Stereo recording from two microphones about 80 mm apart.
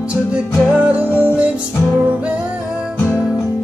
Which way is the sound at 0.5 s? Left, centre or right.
Centre.